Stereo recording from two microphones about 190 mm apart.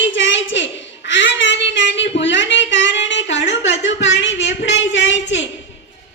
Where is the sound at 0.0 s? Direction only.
75° left (ahead or behind).